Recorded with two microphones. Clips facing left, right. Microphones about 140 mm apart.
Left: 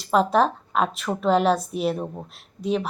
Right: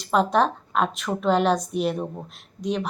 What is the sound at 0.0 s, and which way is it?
A woman's voice, centre (ahead or behind).